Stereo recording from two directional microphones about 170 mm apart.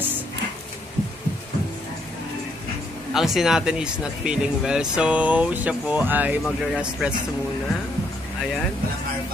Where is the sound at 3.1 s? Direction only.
Centre (ahead or behind).